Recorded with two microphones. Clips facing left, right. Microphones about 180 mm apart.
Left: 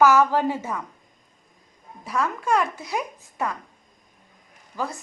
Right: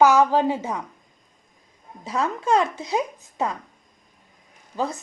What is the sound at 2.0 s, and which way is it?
Speech, 25° right (ahead or behind).